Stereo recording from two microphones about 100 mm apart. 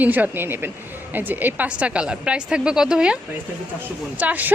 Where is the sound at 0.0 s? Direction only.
15° right (ahead or behind).